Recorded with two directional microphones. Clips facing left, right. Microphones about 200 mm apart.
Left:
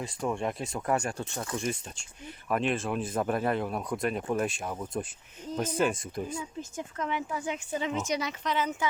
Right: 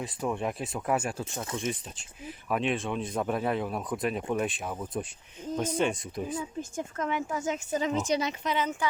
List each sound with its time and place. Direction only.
0.0 s speech: centre (ahead or behind)
6.6 s speech: 50° right (ahead or behind); by 8.4 s 25° right (ahead or behind)
8.4 s speech: 5° left (ahead or behind)